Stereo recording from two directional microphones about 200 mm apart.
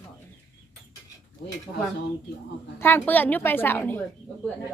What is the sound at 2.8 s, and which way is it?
A woman's voice, 10° left (ahead or behind).